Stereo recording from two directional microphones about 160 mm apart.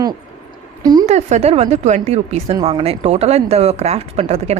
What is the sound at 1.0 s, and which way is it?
Speech, 45° right (ahead or behind).